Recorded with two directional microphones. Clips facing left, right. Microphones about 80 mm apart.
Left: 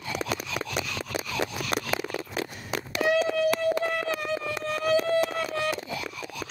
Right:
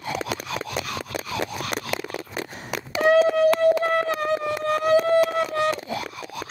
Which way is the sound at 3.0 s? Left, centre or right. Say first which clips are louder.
Right 7 dB; right.